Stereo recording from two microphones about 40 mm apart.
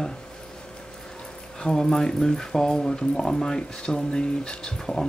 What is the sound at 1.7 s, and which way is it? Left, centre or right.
Speech, centre.